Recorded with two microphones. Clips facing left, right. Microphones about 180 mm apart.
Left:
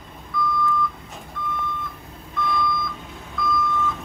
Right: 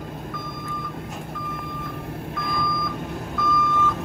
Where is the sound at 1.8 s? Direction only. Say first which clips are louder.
Right 5 dB; 65° right (ahead or behind).